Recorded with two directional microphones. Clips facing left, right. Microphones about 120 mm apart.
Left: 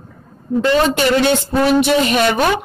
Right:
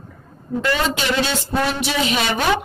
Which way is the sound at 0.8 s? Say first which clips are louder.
Left 7 dB; 55° left (ahead or behind).